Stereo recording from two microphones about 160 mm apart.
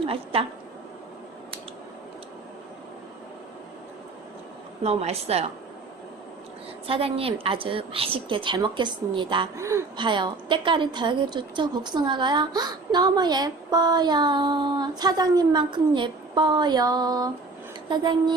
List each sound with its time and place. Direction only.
0.0 s a woman's voice: 35° right (ahead or behind)
4.8 s a woman's voice: 40° right (ahead or behind)
6.8 s a woman's voice: 35° right (ahead or behind)
9.6 s a woman's voice: 20° right (ahead or behind)
10.0 s a woman's voice: 30° right (ahead or behind)